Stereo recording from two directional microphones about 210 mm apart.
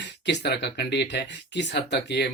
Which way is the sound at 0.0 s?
55° left (ahead or behind).